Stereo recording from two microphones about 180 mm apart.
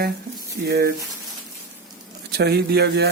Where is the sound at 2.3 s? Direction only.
60° right (ahead or behind).